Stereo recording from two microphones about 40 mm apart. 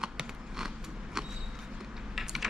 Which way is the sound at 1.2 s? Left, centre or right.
Centre.